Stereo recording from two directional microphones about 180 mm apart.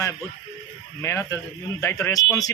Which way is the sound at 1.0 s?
15° left (ahead or behind).